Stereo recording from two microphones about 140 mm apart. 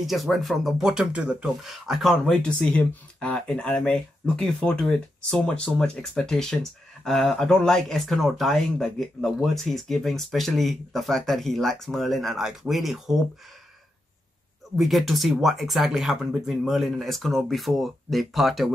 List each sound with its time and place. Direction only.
0.0 s speech: centre (ahead or behind)
14.8 s speech: centre (ahead or behind)